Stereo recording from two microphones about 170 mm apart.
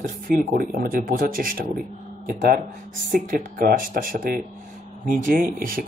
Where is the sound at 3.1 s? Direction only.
55° right (ahead or behind).